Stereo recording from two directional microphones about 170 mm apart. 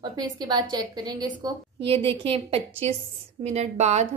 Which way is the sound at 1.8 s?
35° right (ahead or behind).